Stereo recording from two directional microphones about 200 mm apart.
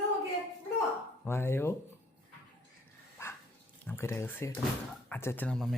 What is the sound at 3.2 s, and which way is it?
Dog, 10° left (ahead or behind).